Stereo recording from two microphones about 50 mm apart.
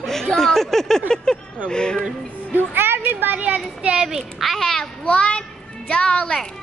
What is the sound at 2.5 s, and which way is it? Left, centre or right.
Speech, right.